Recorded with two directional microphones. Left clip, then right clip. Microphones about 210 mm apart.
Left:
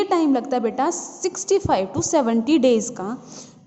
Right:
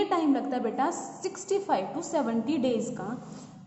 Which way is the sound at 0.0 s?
50° left (ahead or behind).